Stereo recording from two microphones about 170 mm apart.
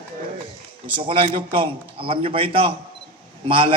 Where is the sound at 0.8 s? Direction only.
30° right (ahead or behind).